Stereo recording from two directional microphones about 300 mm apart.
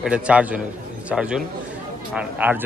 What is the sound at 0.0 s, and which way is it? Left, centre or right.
A man's voice, centre.